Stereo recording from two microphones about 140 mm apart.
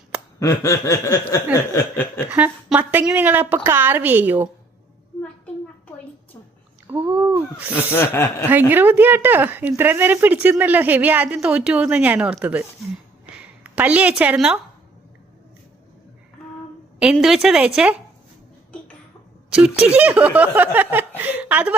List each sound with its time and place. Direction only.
0.3 s snicker: 20° left (ahead or behind)
1.7 s chuckle: 15° left (ahead or behind)
2.3 s speech: 10° right (ahead or behind)
6.9 s speech: 10° right (ahead or behind)
7.8 s chuckle: 15° left (ahead or behind)
8.4 s speech: 15° right (ahead or behind)
13.7 s speech: 10° right (ahead or behind)
17.0 s a woman's voice: 5° right (ahead or behind)
19.5 s speech: 5° right (ahead or behind)